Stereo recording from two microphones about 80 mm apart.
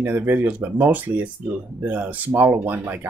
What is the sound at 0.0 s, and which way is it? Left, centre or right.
Speech, right.